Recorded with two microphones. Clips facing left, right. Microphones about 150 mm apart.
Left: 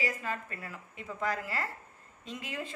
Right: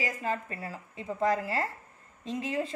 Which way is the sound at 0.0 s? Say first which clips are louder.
Right 3 dB; 35° right (ahead or behind).